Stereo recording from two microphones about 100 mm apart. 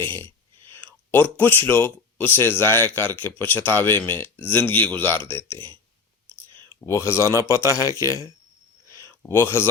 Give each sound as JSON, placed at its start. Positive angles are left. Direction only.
{"t": 0.0, "sound": "a sound", "side_deg": 20}
{"t": 0.7, "sound": "speech", "side_deg": 20}
{"t": 6.8, "sound": "speech", "side_deg": 25}